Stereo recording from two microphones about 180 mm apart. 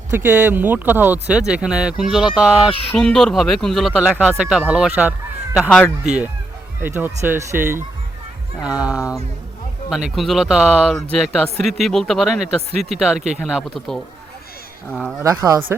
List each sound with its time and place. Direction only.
0.1 s speech: 10° right (ahead or behind)
5.6 s speech: 10° left (ahead or behind)
6.1 s speech: 5° right (ahead or behind)
15.2 s speech: 20° right (ahead or behind)